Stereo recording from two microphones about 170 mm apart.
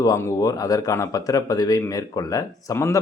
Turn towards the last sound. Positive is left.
turn(degrees=15)  # may be behind; listen again after turning